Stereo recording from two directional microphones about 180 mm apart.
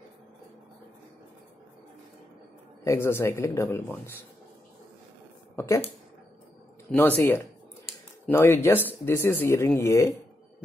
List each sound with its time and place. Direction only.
2.8 s a man's voice: 15° left (ahead or behind)
6.9 s a man's voice: 10° left (ahead or behind)